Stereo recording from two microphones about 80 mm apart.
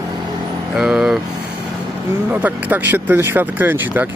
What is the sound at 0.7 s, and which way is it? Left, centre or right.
Vehicle, centre.